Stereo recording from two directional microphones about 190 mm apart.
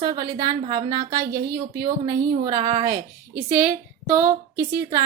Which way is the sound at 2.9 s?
50° right (ahead or behind).